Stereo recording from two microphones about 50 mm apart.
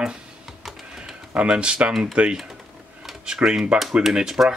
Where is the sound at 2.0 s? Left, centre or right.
Centre.